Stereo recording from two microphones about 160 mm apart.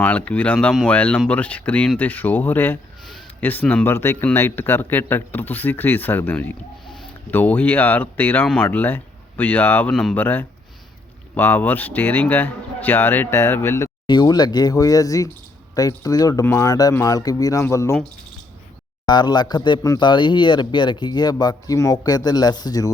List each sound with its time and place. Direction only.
0.0 s speech: 10° left (ahead or behind)
14.1 s a man's voice: 25° left (ahead or behind)
19.0 s a man's voice: 25° left (ahead or behind)